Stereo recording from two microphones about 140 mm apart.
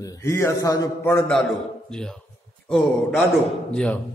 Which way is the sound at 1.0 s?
15° left (ahead or behind).